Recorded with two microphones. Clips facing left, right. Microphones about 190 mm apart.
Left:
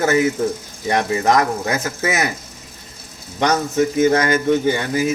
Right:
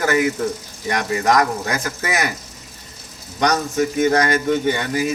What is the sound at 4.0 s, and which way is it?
A man's voice, 30° left (ahead or behind).